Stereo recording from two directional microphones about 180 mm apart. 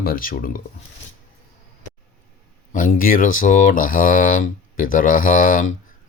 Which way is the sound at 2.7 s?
50° left (ahead or behind).